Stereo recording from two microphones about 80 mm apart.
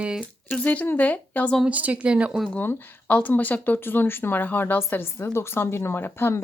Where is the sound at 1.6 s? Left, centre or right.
Centre.